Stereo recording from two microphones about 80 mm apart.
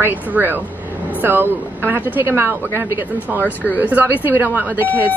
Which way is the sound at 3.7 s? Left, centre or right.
Right.